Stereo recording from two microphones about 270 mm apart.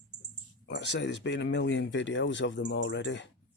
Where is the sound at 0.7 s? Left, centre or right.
Left.